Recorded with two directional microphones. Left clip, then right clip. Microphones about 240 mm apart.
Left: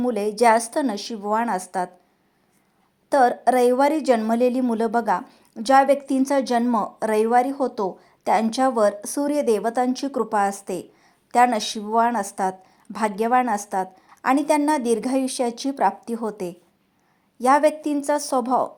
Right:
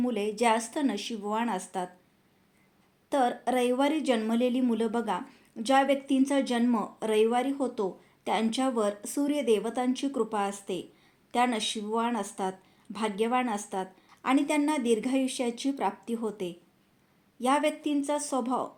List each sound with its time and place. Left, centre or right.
0.0 s a woman's voice: left
3.1 s a woman's voice: left